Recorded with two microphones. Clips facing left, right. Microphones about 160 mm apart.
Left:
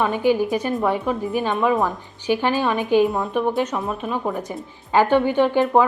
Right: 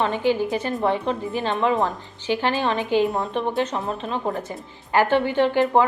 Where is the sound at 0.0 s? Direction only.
15° left (ahead or behind).